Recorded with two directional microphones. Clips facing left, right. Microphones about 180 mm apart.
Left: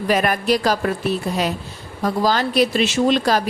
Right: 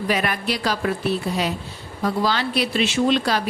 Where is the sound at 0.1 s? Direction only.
45° left (ahead or behind).